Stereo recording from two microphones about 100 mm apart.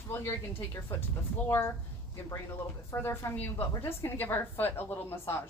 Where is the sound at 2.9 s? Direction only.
25° left (ahead or behind).